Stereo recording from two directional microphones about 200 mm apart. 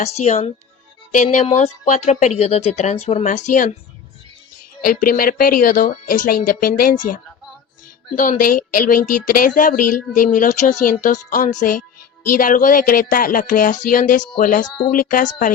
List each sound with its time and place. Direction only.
0.0 s speech: 35° left (ahead or behind)
4.8 s speech: 45° left (ahead or behind)